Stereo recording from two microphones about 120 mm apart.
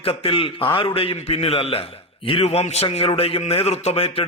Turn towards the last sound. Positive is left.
turn(degrees=55)  # may be behind; listen again after turning